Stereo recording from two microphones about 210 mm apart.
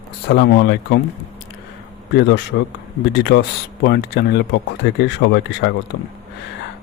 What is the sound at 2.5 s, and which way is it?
Speech, 65° left (ahead or behind).